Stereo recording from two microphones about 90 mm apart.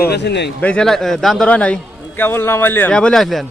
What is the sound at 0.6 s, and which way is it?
Speech, 10° left (ahead or behind).